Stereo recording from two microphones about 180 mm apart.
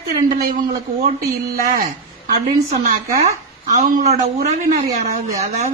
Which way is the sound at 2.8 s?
40° right (ahead or behind).